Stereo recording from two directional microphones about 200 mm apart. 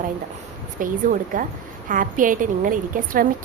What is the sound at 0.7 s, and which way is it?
A woman's voice, 40° right (ahead or behind).